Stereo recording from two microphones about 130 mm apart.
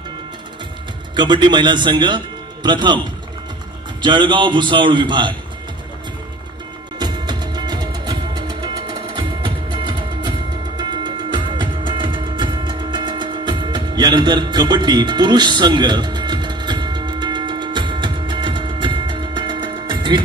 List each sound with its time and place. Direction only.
1.1 s speech: 35° right (ahead or behind)
4.0 s a man's voice: 35° right (ahead or behind)
7.0 s music: 35° right (ahead or behind)